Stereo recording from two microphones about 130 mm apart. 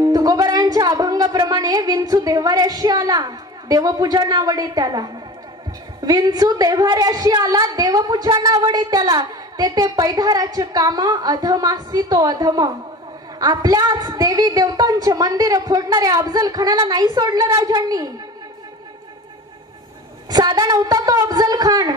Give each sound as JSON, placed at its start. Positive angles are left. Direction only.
{"t": 0.0, "sound": "a woman's voice", "side_deg": -30}
{"t": 20.2, "sound": "a woman's voice", "side_deg": -30}